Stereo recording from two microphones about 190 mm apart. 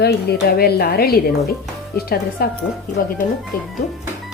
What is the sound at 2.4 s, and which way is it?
Speech, 50° left (ahead or behind).